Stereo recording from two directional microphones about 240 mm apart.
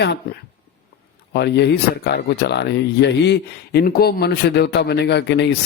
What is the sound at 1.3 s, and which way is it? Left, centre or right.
Speech, left.